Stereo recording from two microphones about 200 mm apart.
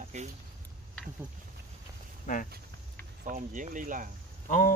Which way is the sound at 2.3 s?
40° left (ahead or behind).